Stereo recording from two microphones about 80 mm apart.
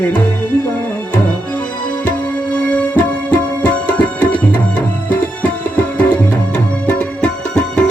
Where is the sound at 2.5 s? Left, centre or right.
Centre.